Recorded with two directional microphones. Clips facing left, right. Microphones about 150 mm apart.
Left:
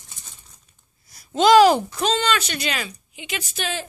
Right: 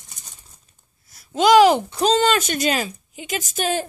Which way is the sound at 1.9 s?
35° right (ahead or behind).